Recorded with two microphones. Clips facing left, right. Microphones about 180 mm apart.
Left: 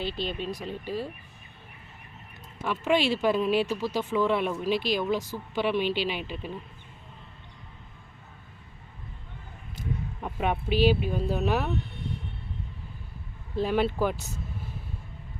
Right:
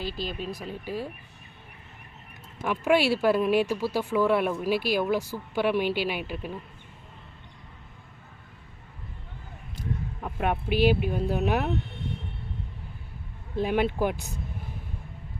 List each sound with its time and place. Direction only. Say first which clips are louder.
0.0 s speech: left 1 dB; 5° right (ahead or behind)
2.6 s speech: right 2 dB; 10° right (ahead or behind)
10.2 s speech: right 1 dB; centre (ahead or behind)
13.6 s speech: even; 15° right (ahead or behind)